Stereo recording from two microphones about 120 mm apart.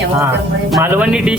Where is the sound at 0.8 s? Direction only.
10° right (ahead or behind).